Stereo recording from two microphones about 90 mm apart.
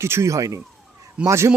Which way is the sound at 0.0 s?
30° right (ahead or behind).